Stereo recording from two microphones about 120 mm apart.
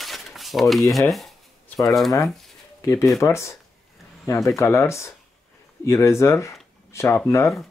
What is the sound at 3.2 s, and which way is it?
Speech, 25° left (ahead or behind).